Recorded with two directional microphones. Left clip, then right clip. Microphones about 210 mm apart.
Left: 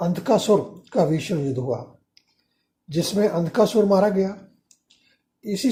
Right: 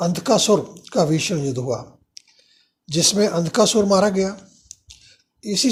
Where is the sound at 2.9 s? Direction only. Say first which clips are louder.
Right 3 dB; 45° right (ahead or behind).